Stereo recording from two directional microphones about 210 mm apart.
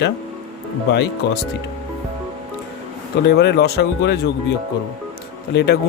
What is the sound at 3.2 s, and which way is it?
Speech, 50° left (ahead or behind).